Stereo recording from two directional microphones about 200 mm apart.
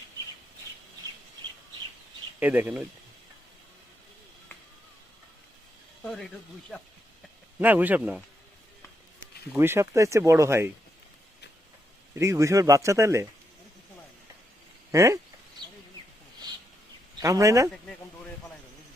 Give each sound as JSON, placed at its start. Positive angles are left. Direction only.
{"t": 2.4, "sound": "speech", "side_deg": -10}
{"t": 7.6, "sound": "speech", "side_deg": -10}
{"t": 9.5, "sound": "speech", "side_deg": -10}
{"t": 12.2, "sound": "speech", "side_deg": -15}
{"t": 14.9, "sound": "speech", "side_deg": -15}
{"t": 17.2, "sound": "speech", "side_deg": -15}